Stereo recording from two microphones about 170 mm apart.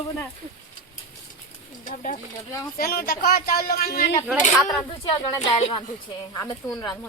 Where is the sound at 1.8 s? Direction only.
50° left (ahead or behind).